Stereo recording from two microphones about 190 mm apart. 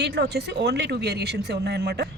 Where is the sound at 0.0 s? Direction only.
60° right (ahead or behind).